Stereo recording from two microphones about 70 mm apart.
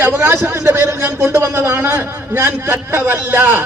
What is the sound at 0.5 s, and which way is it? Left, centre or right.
A man's voice, right.